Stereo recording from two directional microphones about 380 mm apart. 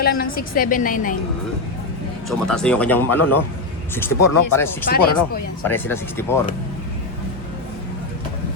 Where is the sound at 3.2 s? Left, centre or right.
Left.